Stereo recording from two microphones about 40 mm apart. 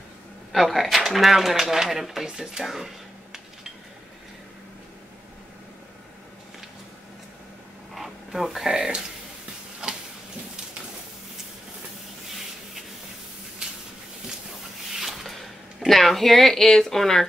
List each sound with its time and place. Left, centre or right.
0.5 s speech: centre
2.2 s speech: right
2.6 s speech: centre
7.9 s speech: centre
9.8 s a sound: right
15.0 s a sound: centre
15.9 s speech: centre